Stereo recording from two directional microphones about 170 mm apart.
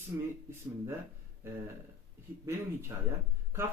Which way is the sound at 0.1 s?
10° right (ahead or behind).